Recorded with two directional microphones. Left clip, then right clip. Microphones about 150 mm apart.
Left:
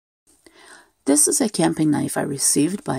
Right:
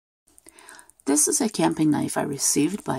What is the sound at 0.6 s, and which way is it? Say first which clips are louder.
Speech: left 1 dB; 30° left (ahead or behind).